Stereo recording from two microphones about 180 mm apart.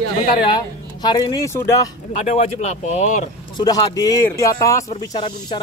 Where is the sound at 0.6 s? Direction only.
25° left (ahead or behind).